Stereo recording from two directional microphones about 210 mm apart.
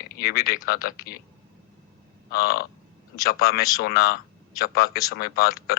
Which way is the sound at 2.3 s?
45° left (ahead or behind).